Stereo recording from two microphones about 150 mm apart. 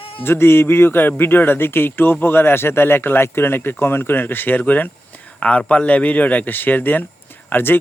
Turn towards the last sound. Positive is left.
turn(degrees=15)  # may be behind; listen again after turning